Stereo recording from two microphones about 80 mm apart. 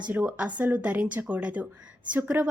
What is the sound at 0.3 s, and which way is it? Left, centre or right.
A woman's voice, centre.